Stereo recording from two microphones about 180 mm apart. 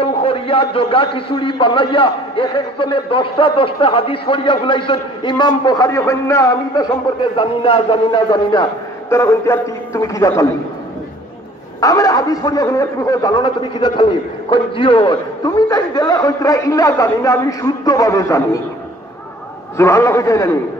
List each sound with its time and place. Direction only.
0.0 s a man's voice: 30° left (ahead or behind)
9.1 s a man's voice: 15° left (ahead or behind)
11.8 s a man's voice: 20° left (ahead or behind)
19.8 s a man's voice: 15° left (ahead or behind)